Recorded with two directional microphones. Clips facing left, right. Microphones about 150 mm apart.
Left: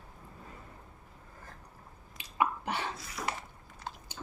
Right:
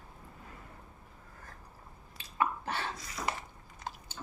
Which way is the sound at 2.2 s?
15° left (ahead or behind).